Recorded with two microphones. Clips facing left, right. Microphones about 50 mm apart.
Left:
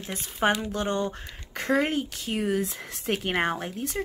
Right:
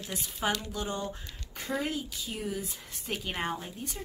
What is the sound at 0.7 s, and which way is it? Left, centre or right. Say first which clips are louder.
Speech: left 7 dB; left.